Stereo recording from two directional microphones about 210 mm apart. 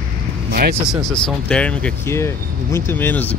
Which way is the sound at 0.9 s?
Centre (ahead or behind).